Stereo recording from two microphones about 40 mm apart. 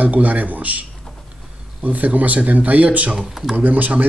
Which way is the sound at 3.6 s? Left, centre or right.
Right.